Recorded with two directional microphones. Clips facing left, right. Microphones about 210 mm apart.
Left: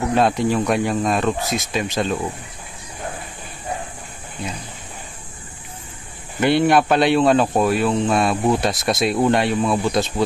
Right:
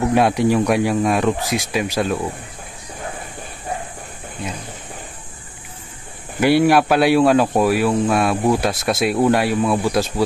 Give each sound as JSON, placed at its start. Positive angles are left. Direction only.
{"t": 0.1, "sound": "speech", "side_deg": -15}
{"t": 6.4, "sound": "speech", "side_deg": -5}